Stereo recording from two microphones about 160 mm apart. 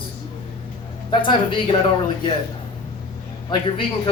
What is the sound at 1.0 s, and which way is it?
Speech, 30° left (ahead or behind).